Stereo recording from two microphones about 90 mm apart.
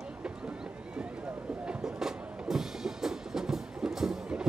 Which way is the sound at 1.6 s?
10° right (ahead or behind).